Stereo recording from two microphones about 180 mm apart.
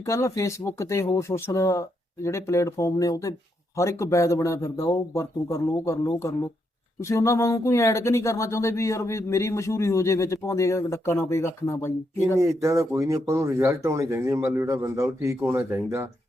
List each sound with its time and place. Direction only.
0.0 s speech: 15° left (ahead or behind)
12.4 s speech: 15° right (ahead or behind)